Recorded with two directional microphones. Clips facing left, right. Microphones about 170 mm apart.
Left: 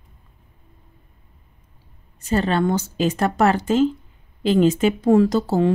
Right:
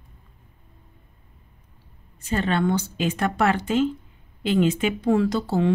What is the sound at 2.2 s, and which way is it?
Speech, 40° left (ahead or behind).